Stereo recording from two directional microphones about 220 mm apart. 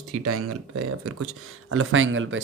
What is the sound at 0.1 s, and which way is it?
Speech, 90° right.